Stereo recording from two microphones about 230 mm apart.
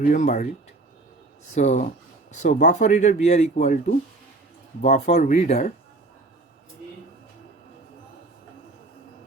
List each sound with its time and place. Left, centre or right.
0.1 s speech: left
1.5 s speech: left